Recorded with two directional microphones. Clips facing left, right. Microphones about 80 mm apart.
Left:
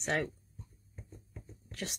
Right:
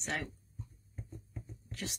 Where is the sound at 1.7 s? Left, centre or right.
Left.